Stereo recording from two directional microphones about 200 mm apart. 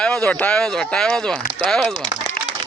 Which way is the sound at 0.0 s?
5° left (ahead or behind).